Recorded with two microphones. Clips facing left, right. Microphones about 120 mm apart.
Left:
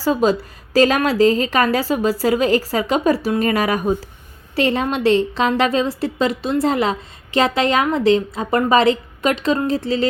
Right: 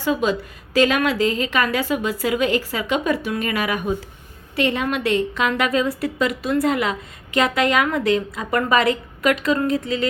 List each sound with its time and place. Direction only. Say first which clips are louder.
0.0 s a woman's voice: left 4 dB; 35° left (ahead or behind)